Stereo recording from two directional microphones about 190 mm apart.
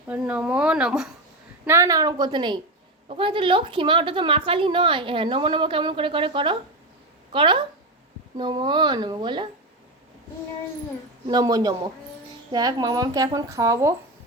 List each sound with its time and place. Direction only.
0.1 s speech: 5° right (ahead or behind)
1.6 s a woman's voice: 15° right (ahead or behind)
11.3 s a woman's voice: 20° right (ahead or behind)